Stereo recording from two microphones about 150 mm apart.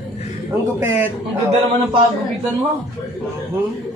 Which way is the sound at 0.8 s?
15° right (ahead or behind).